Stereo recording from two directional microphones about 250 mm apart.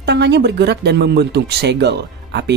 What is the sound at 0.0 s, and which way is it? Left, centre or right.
Speech, right.